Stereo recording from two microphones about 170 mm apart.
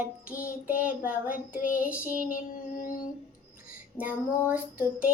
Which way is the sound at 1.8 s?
10° right (ahead or behind).